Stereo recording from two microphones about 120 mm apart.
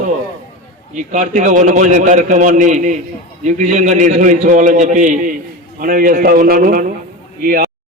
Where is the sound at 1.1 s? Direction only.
90° right.